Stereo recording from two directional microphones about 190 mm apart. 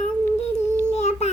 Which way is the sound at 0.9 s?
35° left (ahead or behind).